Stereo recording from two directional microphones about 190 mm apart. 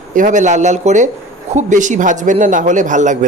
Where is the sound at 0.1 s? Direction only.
40° right (ahead or behind).